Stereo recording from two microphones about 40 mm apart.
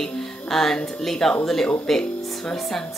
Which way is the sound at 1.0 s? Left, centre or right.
Centre.